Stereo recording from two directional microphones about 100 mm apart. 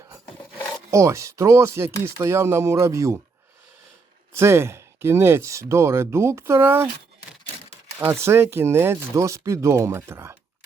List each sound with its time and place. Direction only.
0.9 s speech: 30° right (ahead or behind)
4.4 s speech: 25° right (ahead or behind)
7.9 s speech: 25° right (ahead or behind)